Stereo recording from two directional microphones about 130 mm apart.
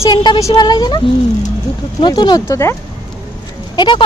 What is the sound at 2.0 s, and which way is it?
Speech, 35° left (ahead or behind).